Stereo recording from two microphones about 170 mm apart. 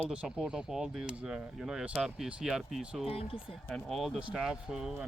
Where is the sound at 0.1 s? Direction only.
5° right (ahead or behind).